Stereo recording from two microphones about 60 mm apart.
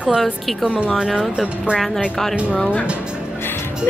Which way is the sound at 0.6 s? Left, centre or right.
Centre.